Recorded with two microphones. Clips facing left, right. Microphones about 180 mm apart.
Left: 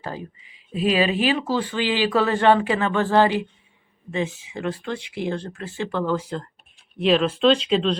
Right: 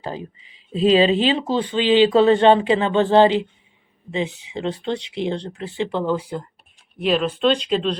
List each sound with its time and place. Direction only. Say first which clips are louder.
0.0 s speech: right 3 dB; 20° right (ahead or behind); by 7.9 s centre (ahead or behind)